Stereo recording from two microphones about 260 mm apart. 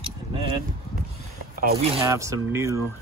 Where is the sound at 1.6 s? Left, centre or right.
Right.